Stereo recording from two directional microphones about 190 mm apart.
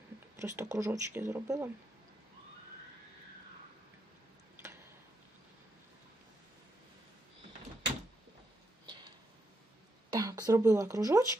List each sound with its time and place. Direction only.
0.4 s speech: 15° right (ahead or behind)
10.2 s speech: 20° right (ahead or behind)